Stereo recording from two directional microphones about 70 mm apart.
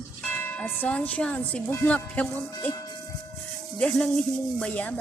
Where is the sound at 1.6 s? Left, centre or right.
Left.